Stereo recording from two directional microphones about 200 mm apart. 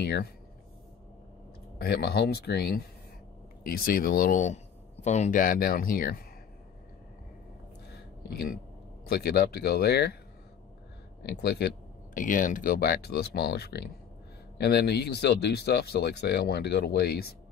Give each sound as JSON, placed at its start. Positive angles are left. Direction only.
{"t": 0.0, "sound": "speech", "side_deg": 55}
{"t": 1.8, "sound": "speech", "side_deg": 50}
{"t": 7.9, "sound": "a sound", "side_deg": 50}
{"t": 9.0, "sound": "speech", "side_deg": 50}
{"t": 11.2, "sound": "speech", "side_deg": 55}